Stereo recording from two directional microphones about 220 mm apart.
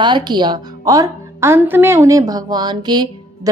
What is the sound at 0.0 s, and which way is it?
A woman's voice, 20° right (ahead or behind).